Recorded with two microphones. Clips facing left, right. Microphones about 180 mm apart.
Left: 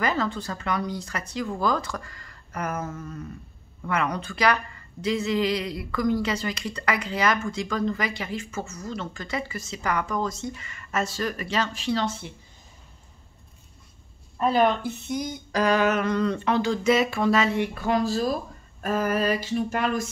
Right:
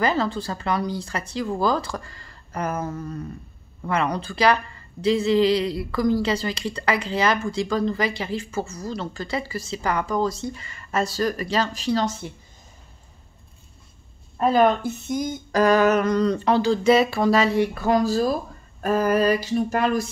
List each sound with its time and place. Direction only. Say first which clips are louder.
0.0 s a woman's voice: right 3 dB; 30° right (ahead or behind)
14.4 s a woman's voice: right 3 dB; 45° right (ahead or behind)